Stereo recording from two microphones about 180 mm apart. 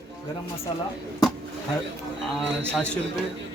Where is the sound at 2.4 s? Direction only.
5° left (ahead or behind).